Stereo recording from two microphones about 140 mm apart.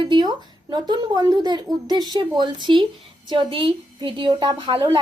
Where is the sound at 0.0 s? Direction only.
35° right (ahead or behind).